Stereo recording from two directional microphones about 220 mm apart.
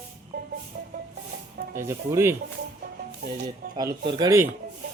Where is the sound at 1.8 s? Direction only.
10° right (ahead or behind).